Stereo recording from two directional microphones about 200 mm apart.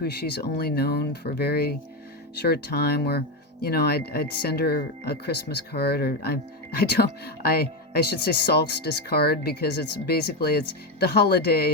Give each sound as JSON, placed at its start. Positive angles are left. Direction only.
{"t": 0.0, "sound": "speech", "side_deg": 55}